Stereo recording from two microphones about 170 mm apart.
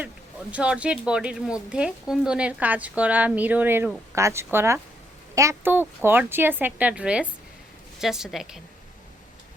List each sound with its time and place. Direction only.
0.5 s a woman's voice: 5° right (ahead or behind)